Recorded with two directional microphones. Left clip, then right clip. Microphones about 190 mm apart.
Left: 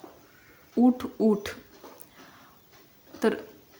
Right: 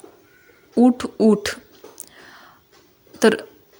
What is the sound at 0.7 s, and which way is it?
Speech, 30° right (ahead or behind).